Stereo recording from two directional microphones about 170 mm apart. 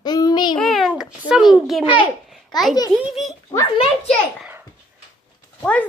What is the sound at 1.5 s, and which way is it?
Speech, centre (ahead or behind).